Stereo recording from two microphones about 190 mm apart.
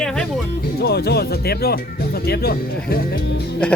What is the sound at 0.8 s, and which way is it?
Speech, 55° left (ahead or behind).